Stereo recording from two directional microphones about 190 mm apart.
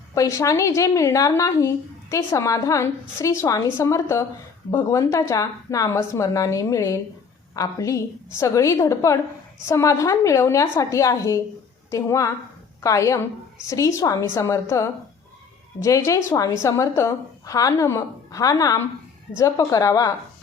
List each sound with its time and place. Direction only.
0.1 s a woman's voice: 15° left (ahead or behind)